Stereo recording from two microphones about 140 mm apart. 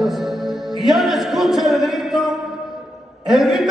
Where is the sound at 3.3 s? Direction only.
Centre (ahead or behind).